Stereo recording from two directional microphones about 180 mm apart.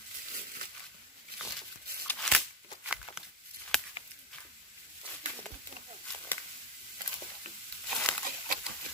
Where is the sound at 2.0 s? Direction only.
5° left (ahead or behind).